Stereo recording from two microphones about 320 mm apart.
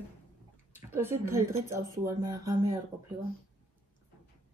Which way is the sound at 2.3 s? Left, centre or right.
Right.